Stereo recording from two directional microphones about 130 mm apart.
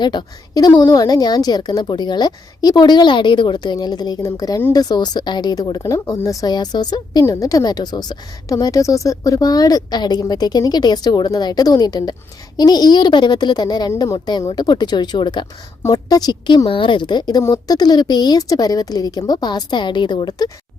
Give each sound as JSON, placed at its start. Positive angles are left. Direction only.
{"t": 0.0, "sound": "speech", "side_deg": 35}